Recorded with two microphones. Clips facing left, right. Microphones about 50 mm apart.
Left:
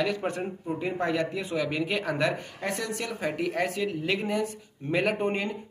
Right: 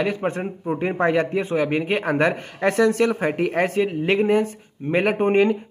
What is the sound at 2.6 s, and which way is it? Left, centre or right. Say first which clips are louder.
Speech: right 16 dB; right.